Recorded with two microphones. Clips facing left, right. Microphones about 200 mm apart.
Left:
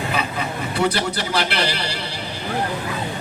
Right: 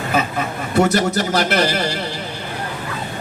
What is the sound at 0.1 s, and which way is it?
A man's voice, 45° right (ahead or behind).